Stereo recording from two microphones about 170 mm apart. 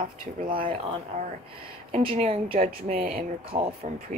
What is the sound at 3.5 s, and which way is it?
Speech, 40° right (ahead or behind).